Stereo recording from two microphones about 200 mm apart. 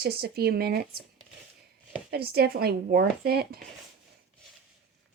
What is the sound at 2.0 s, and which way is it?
A woman's voice, 50° right (ahead or behind).